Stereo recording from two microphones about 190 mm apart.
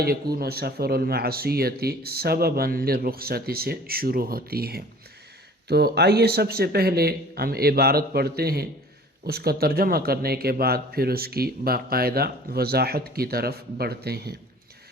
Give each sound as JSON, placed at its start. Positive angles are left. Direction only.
{"t": 0.0, "sound": "speech", "side_deg": -55}